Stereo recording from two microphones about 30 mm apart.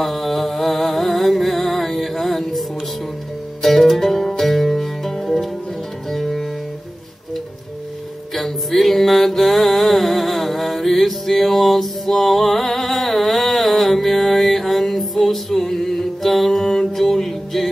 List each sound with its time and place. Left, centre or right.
0.0 s music: centre
3.6 s music: centre
8.4 s music: centre
12.1 s a sound: centre
16.8 s music: centre